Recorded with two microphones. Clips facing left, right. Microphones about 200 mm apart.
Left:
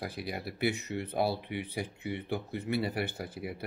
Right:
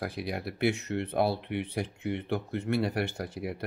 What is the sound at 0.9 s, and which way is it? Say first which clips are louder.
Speech: right 3 dB; 60° right (ahead or behind).